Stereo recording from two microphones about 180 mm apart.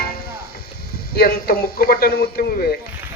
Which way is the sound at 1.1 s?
60° left (ahead or behind).